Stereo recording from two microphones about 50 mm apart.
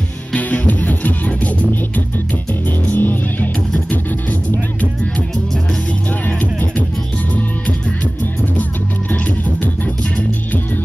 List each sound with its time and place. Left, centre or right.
0.3 s music: left